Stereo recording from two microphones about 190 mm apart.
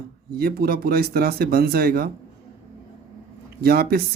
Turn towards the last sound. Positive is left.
turn(degrees=-55)  # may be behind; listen again after turning